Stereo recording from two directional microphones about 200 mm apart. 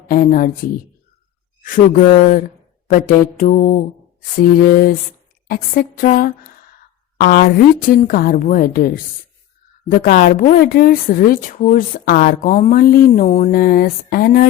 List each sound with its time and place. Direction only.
0.1 s speech: 45° left (ahead or behind)
2.0 s mantra: 40° left (ahead or behind)
4.4 s speech: 45° left (ahead or behind)
9.9 s speech: 40° left (ahead or behind)